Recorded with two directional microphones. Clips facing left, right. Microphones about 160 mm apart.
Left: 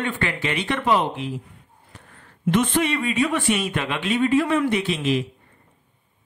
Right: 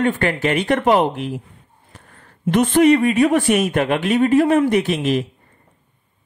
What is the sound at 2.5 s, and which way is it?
Speech, 45° right (ahead or behind).